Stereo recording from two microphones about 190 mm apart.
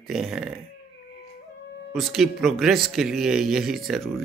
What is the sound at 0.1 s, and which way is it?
Speech, centre (ahead or behind).